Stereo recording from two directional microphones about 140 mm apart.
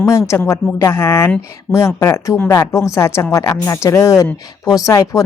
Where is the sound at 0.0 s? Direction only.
20° left (ahead or behind).